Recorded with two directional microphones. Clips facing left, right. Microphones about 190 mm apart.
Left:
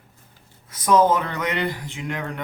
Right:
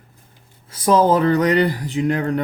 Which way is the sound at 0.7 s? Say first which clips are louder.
Right 3 dB; 30° right (ahead or behind).